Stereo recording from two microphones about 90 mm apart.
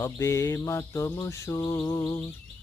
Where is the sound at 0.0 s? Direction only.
35° left (ahead or behind).